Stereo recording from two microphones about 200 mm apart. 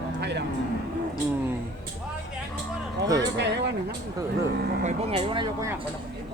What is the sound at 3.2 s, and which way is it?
Speech, 60° right (ahead or behind).